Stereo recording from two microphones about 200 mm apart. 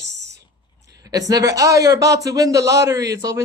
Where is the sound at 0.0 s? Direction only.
60° right (ahead or behind).